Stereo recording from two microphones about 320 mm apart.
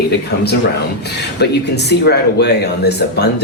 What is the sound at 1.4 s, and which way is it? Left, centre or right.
Speech, left.